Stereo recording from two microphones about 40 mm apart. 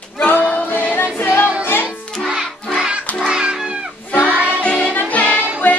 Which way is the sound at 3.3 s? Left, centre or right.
Centre.